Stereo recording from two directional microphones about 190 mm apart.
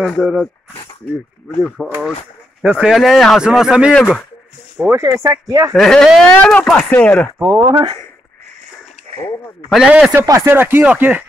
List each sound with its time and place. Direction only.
0.0 s speech: centre (ahead or behind); by 5.8 s 15° right (ahead or behind)
5.8 s speech: centre (ahead or behind)
7.4 s speech: 20° right (ahead or behind)
9.1 s a sound: 35° right (ahead or behind)
9.7 s speech: 5° right (ahead or behind)